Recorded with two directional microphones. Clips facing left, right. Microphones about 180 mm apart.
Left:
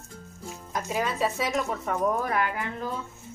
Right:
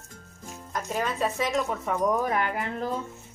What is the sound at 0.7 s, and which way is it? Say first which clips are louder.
Speech: left 1 dB; 5° left (ahead or behind).